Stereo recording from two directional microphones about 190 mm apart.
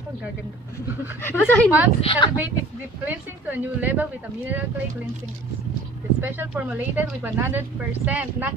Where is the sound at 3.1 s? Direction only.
10° right (ahead or behind).